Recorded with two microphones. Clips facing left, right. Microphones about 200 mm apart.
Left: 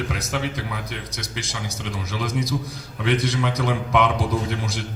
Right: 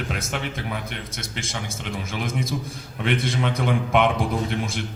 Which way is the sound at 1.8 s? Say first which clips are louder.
Left 1 dB; 55° right (ahead or behind).